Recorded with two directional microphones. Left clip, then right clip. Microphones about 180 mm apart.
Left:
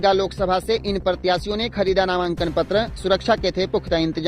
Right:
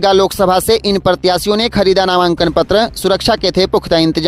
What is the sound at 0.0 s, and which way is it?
Speech, 45° right (ahead or behind).